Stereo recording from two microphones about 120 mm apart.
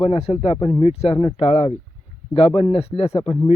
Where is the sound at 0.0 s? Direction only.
55° left (ahead or behind).